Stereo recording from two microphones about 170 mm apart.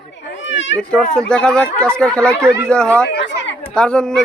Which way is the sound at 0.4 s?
90° left.